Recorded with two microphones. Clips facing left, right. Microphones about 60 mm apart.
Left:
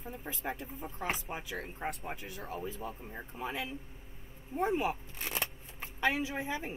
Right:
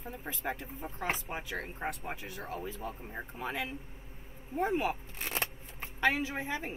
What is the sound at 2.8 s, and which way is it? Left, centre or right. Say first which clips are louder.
Speech: right 1 dB; centre.